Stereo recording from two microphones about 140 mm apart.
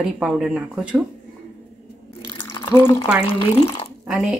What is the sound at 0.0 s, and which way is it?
Speech, 5° right (ahead or behind).